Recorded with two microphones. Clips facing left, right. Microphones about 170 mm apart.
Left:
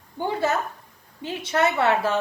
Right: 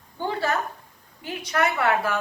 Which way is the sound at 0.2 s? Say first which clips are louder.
Left 2 dB; 20° left (ahead or behind).